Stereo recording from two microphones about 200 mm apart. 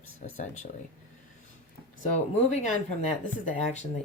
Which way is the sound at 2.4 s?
35° left (ahead or behind).